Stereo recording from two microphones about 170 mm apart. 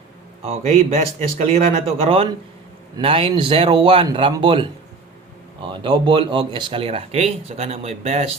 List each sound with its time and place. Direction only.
0.4 s speech: 35° right (ahead or behind)
5.6 s speech: 30° right (ahead or behind)